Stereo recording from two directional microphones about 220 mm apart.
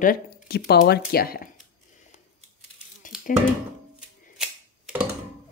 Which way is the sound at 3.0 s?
35° left (ahead or behind).